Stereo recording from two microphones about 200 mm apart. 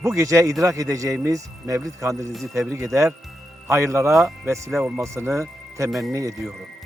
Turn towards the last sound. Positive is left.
turn(degrees=-15)  # may be behind; listen again after turning